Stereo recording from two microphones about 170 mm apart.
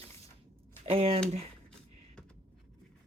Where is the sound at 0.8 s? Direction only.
35° right (ahead or behind).